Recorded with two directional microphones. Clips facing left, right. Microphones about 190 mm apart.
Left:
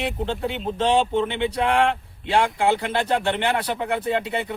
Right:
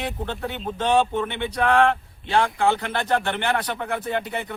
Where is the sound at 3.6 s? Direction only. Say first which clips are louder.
Left 2 dB; 10° left (ahead or behind).